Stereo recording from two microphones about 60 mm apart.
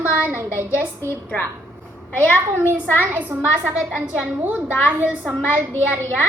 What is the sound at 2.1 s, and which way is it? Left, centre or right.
Speech, left.